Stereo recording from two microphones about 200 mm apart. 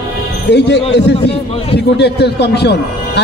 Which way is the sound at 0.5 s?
60° left (ahead or behind).